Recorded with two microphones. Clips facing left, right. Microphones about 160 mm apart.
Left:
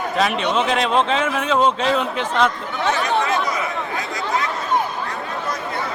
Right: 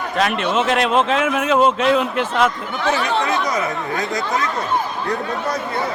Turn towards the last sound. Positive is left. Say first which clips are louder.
# right 3 dB
turn(degrees=-40)  # may be behind; listen again after turning